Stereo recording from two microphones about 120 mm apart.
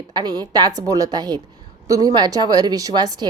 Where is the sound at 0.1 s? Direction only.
35° right (ahead or behind).